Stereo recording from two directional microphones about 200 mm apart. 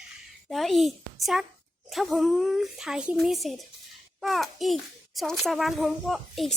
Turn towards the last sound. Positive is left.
turn(degrees=0)  # may be behind; listen again after turning